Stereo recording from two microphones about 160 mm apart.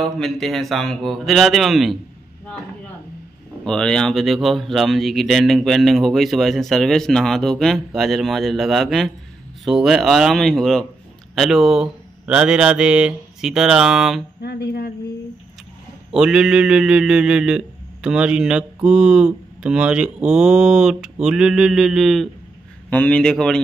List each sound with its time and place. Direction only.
0.0 s a man's voice: centre (ahead or behind)
3.6 s a man's voice: 5° left (ahead or behind)
14.4 s a woman's voice: 90° left
16.1 s a man's voice: 5° right (ahead or behind)
22.8 s a man's voice: 10° left (ahead or behind)